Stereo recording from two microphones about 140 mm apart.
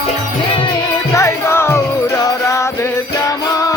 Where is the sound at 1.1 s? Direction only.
20° left (ahead or behind).